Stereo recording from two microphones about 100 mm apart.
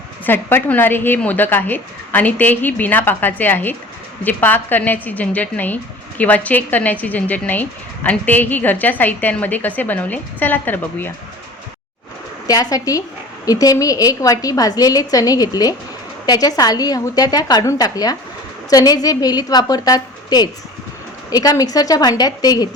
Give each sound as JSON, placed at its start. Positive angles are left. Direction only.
{"t": 0.3, "sound": "a woman's voice", "side_deg": 20}
{"t": 12.5, "sound": "a woman's voice", "side_deg": 35}